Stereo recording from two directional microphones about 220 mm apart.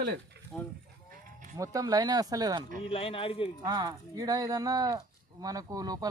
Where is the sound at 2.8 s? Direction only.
25° left (ahead or behind).